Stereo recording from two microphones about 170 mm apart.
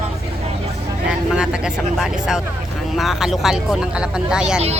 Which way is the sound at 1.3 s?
5° right (ahead or behind).